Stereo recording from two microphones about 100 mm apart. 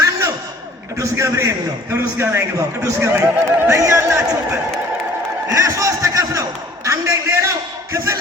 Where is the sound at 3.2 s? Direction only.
25° right (ahead or behind).